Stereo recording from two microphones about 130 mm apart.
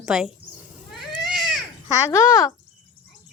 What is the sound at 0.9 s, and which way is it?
Cat, centre (ahead or behind).